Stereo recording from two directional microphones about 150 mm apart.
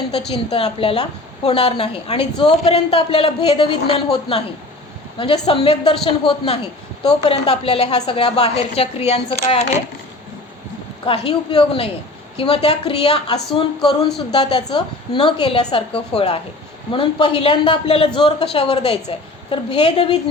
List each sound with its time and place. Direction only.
0.3 s a woman's voice: 40° left (ahead or behind)
11.0 s speech: 40° left (ahead or behind)